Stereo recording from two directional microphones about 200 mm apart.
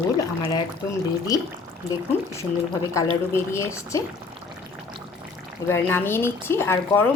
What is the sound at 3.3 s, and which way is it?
Speech, 15° left (ahead or behind).